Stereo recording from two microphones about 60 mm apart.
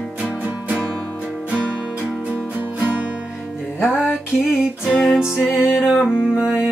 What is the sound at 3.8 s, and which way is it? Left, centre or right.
Music, centre.